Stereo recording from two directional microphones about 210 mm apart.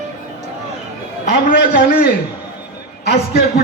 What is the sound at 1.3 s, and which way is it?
A man's voice, 45° left (ahead or behind).